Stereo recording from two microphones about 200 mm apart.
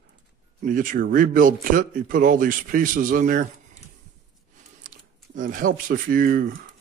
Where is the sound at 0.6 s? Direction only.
40° right (ahead or behind).